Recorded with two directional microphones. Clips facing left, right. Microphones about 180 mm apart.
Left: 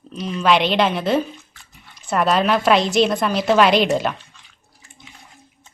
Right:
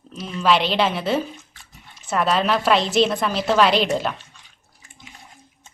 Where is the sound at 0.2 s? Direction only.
5° right (ahead or behind).